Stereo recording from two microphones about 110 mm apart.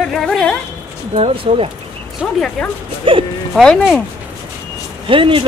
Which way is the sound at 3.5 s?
5° left (ahead or behind).